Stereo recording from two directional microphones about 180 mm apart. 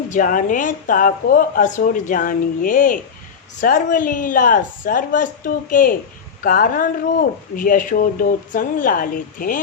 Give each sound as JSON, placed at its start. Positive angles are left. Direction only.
{"t": 0.1, "sound": "speech", "side_deg": 45}
{"t": 6.4, "sound": "speech", "side_deg": 55}